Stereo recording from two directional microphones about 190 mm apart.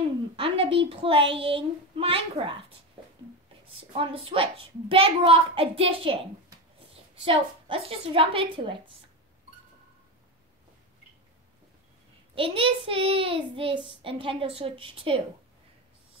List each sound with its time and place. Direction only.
0.4 s a woman's voice: 30° right (ahead or behind)
1.2 s speech: 70° right (ahead or behind)
1.5 s a child's voice: 30° right (ahead or behind)
3.7 s a child's voice: 30° right (ahead or behind)
12.4 s a child's voice: 30° right (ahead or behind)